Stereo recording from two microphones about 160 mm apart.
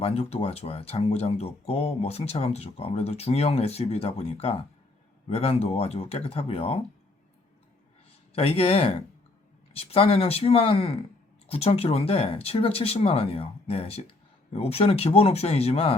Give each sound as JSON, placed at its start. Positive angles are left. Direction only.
{"t": 0.0, "sound": "speech", "side_deg": 40}
{"t": 8.3, "sound": "speech", "side_deg": 35}